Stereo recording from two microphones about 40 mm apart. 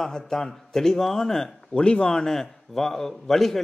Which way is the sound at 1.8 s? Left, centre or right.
Left.